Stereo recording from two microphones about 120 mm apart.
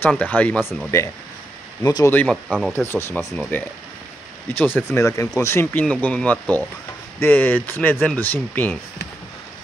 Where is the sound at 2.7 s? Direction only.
20° left (ahead or behind).